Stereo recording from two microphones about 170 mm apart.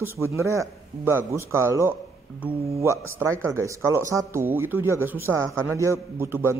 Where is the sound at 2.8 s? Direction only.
15° right (ahead or behind).